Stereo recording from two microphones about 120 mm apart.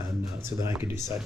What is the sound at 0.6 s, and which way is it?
Speech, 20° right (ahead or behind).